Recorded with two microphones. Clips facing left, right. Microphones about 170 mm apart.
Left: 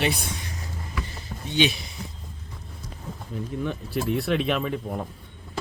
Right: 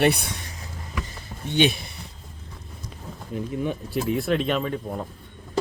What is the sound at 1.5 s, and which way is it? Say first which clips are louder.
Speech: right 2 dB; 50° right (ahead or behind).